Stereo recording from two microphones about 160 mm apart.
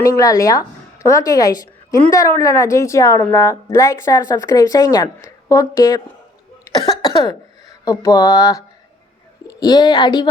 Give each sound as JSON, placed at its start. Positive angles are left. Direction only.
{"t": 0.0, "sound": "a woman's voice", "side_deg": 20}
{"t": 7.0, "sound": "a woman's voice", "side_deg": 25}